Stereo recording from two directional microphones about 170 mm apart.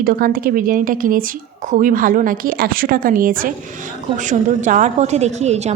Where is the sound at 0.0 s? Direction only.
55° right (ahead or behind).